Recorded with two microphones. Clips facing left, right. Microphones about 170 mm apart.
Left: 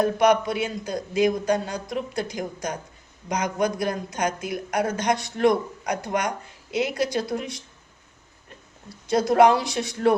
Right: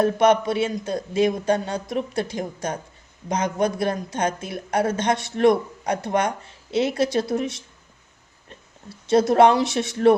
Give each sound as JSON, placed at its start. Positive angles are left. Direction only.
{"t": 0.0, "sound": "speech", "side_deg": -25}
{"t": 9.0, "sound": "speech", "side_deg": -25}